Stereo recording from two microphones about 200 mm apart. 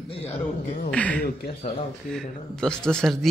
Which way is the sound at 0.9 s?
5° left (ahead or behind).